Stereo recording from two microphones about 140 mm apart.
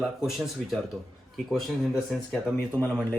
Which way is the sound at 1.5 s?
Centre (ahead or behind).